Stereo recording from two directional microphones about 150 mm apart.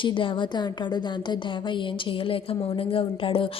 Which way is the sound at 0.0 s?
35° left (ahead or behind).